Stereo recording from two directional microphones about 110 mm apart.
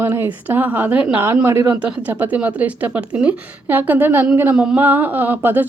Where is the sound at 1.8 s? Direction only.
15° right (ahead or behind).